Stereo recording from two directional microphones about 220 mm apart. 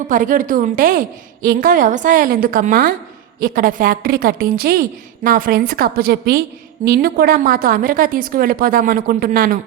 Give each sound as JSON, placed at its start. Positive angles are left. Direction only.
{"t": 0.1, "sound": "a woman's voice", "side_deg": -35}